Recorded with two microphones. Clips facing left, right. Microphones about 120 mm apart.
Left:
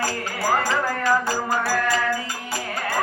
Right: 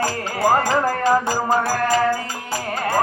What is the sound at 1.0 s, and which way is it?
Music, 30° right (ahead or behind).